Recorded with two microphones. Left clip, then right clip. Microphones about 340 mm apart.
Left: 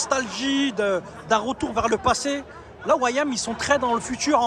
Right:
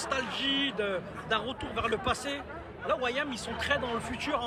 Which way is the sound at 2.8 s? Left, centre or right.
Left.